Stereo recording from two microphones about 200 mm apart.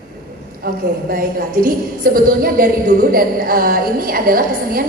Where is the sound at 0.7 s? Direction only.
45° right (ahead or behind).